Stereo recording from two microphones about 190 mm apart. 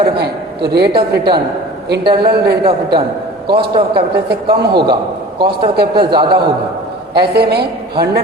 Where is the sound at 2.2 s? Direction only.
55° right (ahead or behind).